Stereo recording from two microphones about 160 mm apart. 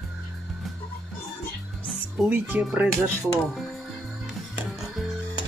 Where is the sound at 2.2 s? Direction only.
10° right (ahead or behind).